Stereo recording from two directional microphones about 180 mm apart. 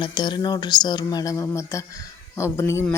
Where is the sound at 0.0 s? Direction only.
25° left (ahead or behind).